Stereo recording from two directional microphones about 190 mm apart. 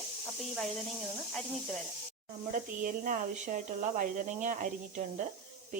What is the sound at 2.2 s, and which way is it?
Speech, 45° right (ahead or behind).